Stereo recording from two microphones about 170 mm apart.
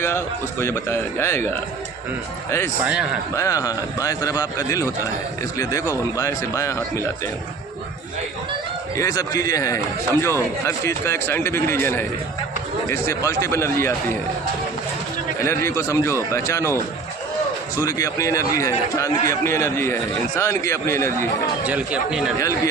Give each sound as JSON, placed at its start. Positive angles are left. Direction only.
{"t": 0.6, "sound": "speech", "side_deg": 15}
{"t": 2.8, "sound": "speech", "side_deg": -5}
{"t": 3.3, "sound": "a man's voice", "side_deg": 20}
{"t": 9.0, "sound": "speech", "side_deg": 20}
{"t": 15.4, "sound": "speech", "side_deg": 15}
{"t": 21.7, "sound": "speech", "side_deg": -10}
{"t": 22.4, "sound": "a man's voice", "side_deg": 20}